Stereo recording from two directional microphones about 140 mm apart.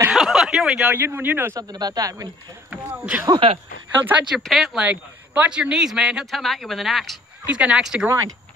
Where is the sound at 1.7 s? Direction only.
30° right (ahead or behind).